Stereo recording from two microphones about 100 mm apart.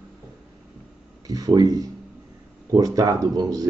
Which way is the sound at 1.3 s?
40° right (ahead or behind).